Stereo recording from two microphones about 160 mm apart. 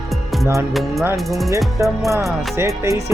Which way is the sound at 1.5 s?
20° right (ahead or behind).